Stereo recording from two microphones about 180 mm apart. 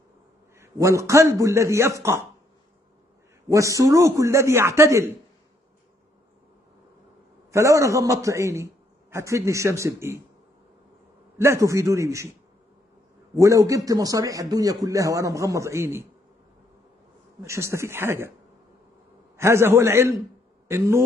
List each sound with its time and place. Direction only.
0.6 s a man's voice: 15° right (ahead or behind)
3.4 s a man's voice: 15° right (ahead or behind)
7.5 s a man's voice: 15° right (ahead or behind)
11.3 s a man's voice: 15° right (ahead or behind)
13.4 s a man's voice: 15° right (ahead or behind)
17.4 s a man's voice: 15° right (ahead or behind)
19.3 s a man's voice: 15° right (ahead or behind)